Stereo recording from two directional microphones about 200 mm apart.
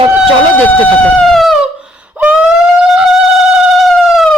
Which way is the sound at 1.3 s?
Centre (ahead or behind).